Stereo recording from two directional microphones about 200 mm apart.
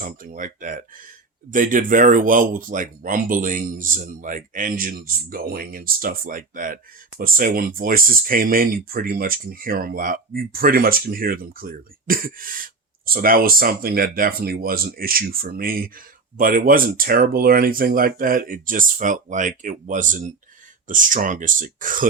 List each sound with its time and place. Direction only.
0.0 s speech: 40° right (ahead or behind)